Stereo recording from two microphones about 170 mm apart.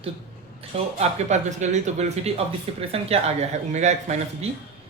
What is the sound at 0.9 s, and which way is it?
Speech, 45° right (ahead or behind).